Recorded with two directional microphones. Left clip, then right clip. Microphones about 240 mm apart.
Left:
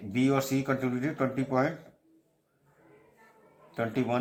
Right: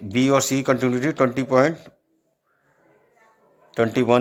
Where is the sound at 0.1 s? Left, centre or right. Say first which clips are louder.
Right 9 dB; right.